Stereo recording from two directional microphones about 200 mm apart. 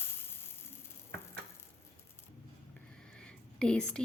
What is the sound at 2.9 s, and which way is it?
Whispering, 5° left (ahead or behind).